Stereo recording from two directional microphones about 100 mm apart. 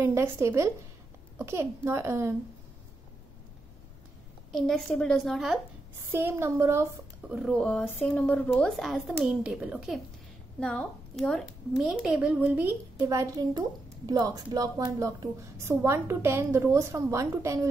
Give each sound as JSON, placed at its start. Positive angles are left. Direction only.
{"t": 0.0, "sound": "a woman's voice", "side_deg": -25}
{"t": 4.6, "sound": "a woman's voice", "side_deg": 5}
{"t": 6.1, "sound": "a woman's voice", "side_deg": -25}
{"t": 7.2, "sound": "speech", "side_deg": -10}
{"t": 7.5, "sound": "a woman's voice", "side_deg": 5}
{"t": 8.1, "sound": "a woman's voice", "side_deg": 15}
{"t": 8.5, "sound": "a woman's voice", "side_deg": 5}
{"t": 10.6, "sound": "a woman's voice", "side_deg": 10}
{"t": 13.1, "sound": "a woman's voice", "side_deg": -35}